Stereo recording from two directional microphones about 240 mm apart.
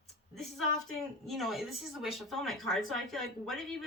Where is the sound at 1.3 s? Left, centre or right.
Centre.